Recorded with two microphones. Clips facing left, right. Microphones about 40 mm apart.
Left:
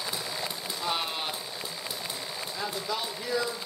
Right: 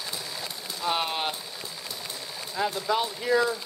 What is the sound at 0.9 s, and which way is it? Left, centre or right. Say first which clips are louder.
Speech: right 5 dB; right.